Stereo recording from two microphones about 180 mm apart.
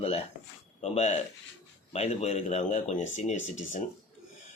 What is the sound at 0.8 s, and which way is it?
A man's voice, 40° left (ahead or behind).